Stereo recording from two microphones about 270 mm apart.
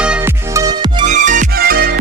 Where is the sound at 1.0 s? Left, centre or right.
Right.